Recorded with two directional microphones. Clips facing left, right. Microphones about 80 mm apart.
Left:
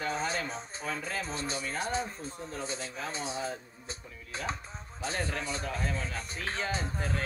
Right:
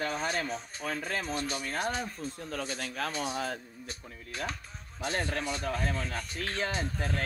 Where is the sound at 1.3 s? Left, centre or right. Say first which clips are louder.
Right 2 dB; left.